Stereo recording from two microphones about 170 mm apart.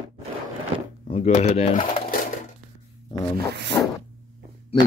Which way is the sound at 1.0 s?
35° left (ahead or behind).